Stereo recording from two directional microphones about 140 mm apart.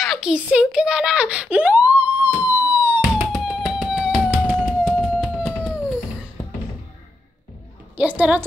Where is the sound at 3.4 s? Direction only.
5° right (ahead or behind).